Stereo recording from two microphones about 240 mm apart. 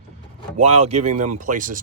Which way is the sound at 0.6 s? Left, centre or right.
Right.